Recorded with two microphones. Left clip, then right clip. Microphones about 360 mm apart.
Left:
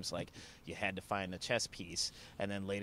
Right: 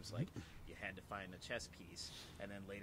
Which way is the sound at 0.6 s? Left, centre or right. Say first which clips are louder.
Left 12 dB; left.